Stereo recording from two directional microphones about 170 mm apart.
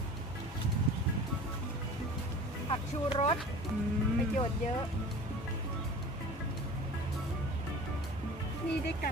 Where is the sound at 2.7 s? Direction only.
35° left (ahead or behind).